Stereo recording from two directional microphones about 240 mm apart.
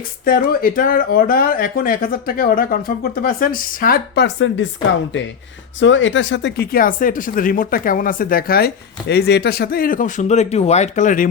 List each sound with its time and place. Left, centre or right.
0.3 s speech: left
5.8 s speech: left